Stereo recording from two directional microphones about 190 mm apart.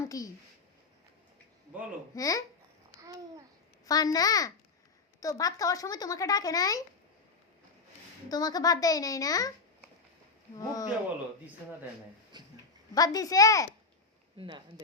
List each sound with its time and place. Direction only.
0.0 s speech: 20° left (ahead or behind)
2.1 s speech: 20° left (ahead or behind)
3.0 s babbling: 20° right (ahead or behind)
3.8 s a child's voice: 20° left (ahead or behind)
8.3 s a child's voice: 20° left (ahead or behind)
10.6 s a child's voice: 20° left (ahead or behind)
12.3 s dog: 20° right (ahead or behind)
12.9 s a child's voice: 20° left (ahead or behind)
14.3 s speech: 25° right (ahead or behind)